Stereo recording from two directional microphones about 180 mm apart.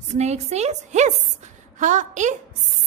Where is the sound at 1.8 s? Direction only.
45° right (ahead or behind).